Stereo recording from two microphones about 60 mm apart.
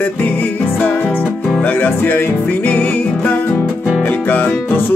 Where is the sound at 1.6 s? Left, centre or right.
Left.